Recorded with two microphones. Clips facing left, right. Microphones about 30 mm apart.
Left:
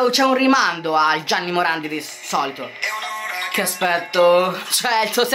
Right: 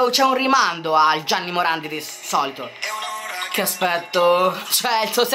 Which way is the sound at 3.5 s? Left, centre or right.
Centre.